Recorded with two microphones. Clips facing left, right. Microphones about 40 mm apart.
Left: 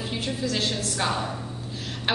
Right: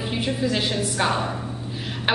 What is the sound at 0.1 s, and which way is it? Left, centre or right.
A woman's voice, centre.